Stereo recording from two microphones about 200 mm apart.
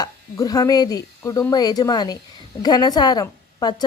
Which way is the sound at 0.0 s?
20° left (ahead or behind).